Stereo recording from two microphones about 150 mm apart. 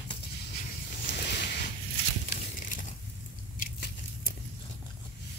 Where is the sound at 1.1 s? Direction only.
90° left.